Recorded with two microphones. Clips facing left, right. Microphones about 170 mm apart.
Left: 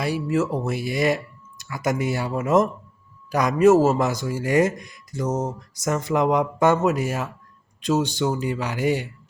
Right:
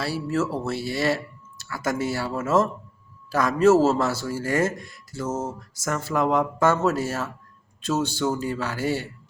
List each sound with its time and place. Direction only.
0.0 s speech: 15° left (ahead or behind)